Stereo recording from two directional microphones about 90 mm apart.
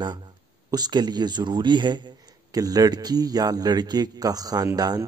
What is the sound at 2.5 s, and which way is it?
Speech, 45° right (ahead or behind).